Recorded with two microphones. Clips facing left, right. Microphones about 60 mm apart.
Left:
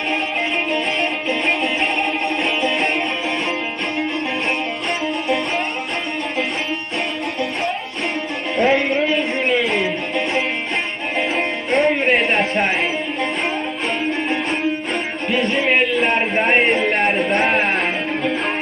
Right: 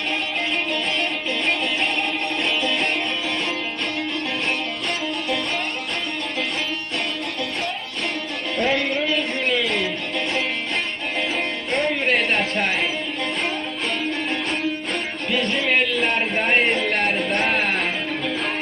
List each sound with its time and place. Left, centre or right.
2.2 s music: centre
8.5 s music: centre
12.0 s a sound: centre
15.3 s music: centre
15.6 s a sound: centre
16.7 s music: centre
17.0 s music: centre